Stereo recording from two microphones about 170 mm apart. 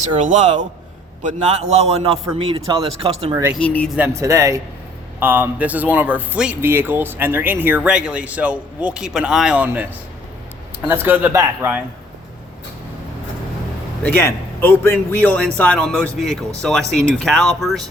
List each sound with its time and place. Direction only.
0.0 s a man's voice: 45° right (ahead or behind)
3.6 s a man's voice: 10° left (ahead or behind)
3.9 s speech: 15° right (ahead or behind)
10.8 s speech: 10° right (ahead or behind)
14.0 s a man's voice: 15° left (ahead or behind)